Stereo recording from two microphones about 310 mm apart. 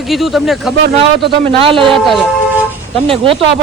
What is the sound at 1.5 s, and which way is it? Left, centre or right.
Speech, centre.